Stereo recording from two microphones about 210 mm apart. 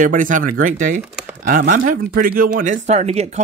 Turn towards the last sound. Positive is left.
turn(degrees=-30)  # may be behind; listen again after turning